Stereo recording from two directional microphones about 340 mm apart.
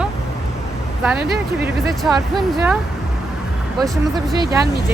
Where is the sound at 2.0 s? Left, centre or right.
Centre.